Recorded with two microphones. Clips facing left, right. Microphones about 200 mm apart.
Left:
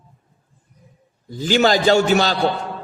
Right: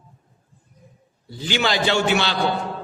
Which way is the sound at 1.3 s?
45° left (ahead or behind).